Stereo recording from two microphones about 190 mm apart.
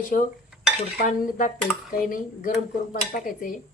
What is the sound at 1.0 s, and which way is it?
Speech, 45° left (ahead or behind).